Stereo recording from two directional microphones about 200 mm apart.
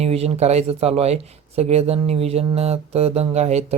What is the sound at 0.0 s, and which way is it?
Speech, 30° right (ahead or behind).